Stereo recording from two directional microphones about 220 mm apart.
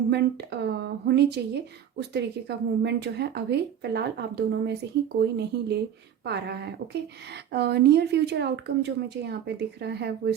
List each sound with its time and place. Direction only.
0.1 s speech: 50° right (ahead or behind)